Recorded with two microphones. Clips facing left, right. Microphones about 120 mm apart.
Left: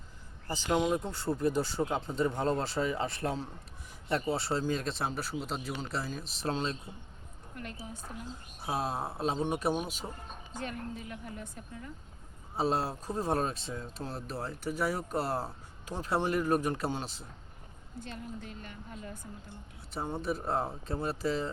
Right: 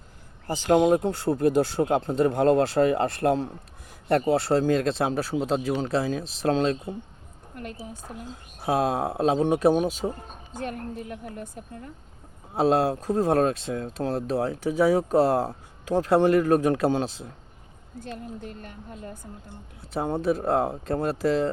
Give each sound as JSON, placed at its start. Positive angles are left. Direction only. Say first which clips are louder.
{"t": 0.4, "sound": "speech", "louder": "right 9 dB", "side_deg": -60}
{"t": 4.5, "sound": "speech", "louder": "right 10 dB", "side_deg": -90}
{"t": 7.5, "sound": "a woman's voice", "louder": "right 6 dB", "side_deg": -50}
{"t": 8.6, "sound": "speech", "louder": "right 10 dB", "side_deg": -90}
{"t": 10.0, "sound": "speech", "louder": "right 13 dB", "side_deg": -75}
{"t": 10.6, "sound": "a woman's voice", "louder": "right 6 dB", "side_deg": -55}
{"t": 12.5, "sound": "speech", "louder": "right 9 dB", "side_deg": -90}
{"t": 13.9, "sound": "speech", "louder": "right 13 dB", "side_deg": -75}
{"t": 18.0, "sound": "a woman's voice", "louder": "right 6 dB", "side_deg": -50}
{"t": 19.9, "sound": "speech", "louder": "right 9 dB", "side_deg": -85}
{"t": 20.4, "sound": "speech", "louder": "right 9 dB", "side_deg": -70}